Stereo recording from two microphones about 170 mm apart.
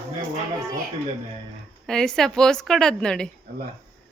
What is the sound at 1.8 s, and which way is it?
Speech, 5° left (ahead or behind).